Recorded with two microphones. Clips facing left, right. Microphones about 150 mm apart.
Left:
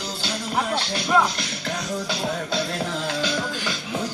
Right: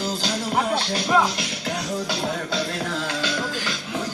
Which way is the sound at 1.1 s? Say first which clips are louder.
Even; 5° right (ahead or behind).